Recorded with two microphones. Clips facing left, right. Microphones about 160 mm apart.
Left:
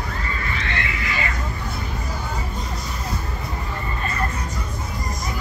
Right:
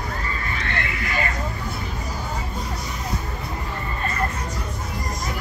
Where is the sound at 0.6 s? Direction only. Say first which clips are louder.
Even; 50° right (ahead or behind).